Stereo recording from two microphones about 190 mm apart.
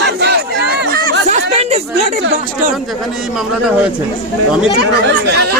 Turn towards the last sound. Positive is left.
turn(degrees=-60)  # may be behind; listen again after turning